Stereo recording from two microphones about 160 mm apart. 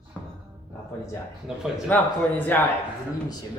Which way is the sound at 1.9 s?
10° left (ahead or behind).